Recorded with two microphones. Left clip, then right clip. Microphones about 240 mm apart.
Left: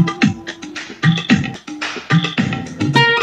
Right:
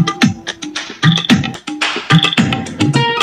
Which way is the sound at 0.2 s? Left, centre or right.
Right.